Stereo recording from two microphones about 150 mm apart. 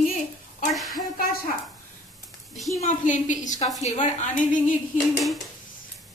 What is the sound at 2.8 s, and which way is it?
A woman's voice, 55° left (ahead or behind).